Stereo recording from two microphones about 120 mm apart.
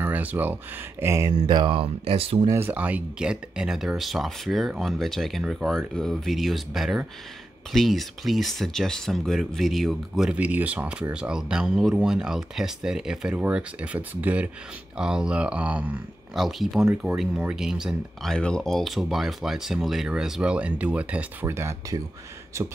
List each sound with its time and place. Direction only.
0.0 s speech: 15° right (ahead or behind)
1.3 s speech: 45° right (ahead or behind)
2.5 s speech: 15° right (ahead or behind); by 10.3 s centre (ahead or behind)
10.3 s speech: 10° right (ahead or behind)
16.3 s speech: centre (ahead or behind); by 22.0 s 25° right (ahead or behind)